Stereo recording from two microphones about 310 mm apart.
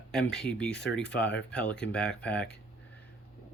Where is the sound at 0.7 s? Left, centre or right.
Left.